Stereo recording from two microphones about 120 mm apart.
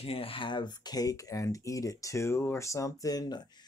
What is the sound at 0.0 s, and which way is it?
Speech, 50° left (ahead or behind).